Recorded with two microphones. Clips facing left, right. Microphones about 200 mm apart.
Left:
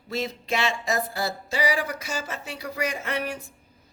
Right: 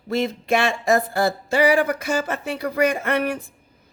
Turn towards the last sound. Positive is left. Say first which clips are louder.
# right 7 dB
turn(degrees=-55)  # may be behind; listen again after turning